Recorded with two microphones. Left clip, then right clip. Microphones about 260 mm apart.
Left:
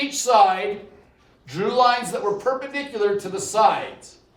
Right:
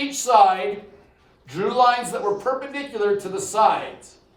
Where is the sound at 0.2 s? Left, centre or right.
Centre.